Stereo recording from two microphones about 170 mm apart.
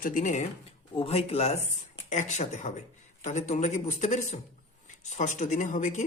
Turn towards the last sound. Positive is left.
turn(degrees=45)  # may be behind; listen again after turning